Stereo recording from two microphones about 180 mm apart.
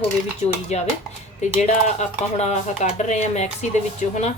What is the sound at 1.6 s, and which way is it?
A woman's voice, 40° left (ahead or behind).